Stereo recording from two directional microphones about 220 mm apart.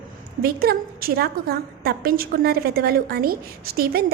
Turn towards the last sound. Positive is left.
turn(degrees=-45)  # may be behind; listen again after turning